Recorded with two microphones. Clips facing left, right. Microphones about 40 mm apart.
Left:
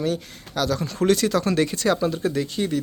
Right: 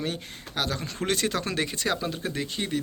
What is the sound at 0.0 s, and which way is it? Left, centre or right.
Speech, right.